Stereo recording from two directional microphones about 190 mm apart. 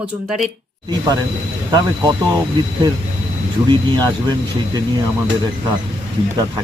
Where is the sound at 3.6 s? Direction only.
25° right (ahead or behind).